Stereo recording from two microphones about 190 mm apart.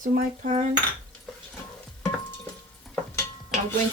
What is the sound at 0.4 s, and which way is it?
Speech, 35° right (ahead or behind).